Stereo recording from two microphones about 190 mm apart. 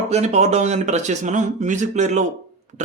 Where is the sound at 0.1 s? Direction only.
35° right (ahead or behind).